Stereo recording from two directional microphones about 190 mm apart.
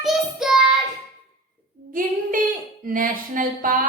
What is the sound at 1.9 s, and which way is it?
A woman's voice, 45° right (ahead or behind).